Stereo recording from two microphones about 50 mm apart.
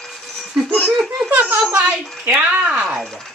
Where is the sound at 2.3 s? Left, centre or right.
Right.